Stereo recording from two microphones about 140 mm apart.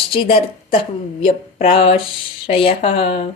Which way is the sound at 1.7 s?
40° left (ahead or behind).